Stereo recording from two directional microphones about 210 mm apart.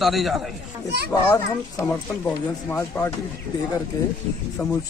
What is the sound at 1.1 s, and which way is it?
Speech, 15° left (ahead or behind).